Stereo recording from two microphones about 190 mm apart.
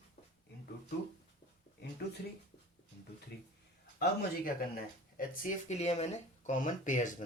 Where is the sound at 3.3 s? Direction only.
60° left (ahead or behind).